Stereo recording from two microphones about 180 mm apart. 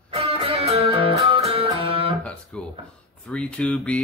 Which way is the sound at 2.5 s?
5° left (ahead or behind).